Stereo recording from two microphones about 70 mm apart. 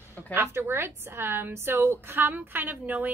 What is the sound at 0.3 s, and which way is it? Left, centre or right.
A woman's voice, right.